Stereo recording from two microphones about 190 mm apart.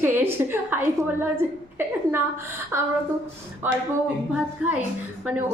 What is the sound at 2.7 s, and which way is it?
A woman's voice, 10° right (ahead or behind).